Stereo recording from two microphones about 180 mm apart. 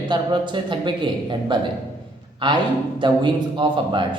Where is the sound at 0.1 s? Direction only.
25° right (ahead or behind).